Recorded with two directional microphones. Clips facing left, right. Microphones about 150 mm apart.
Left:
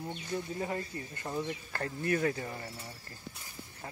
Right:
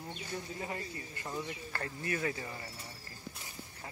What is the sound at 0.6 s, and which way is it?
Speech, 40° left (ahead or behind).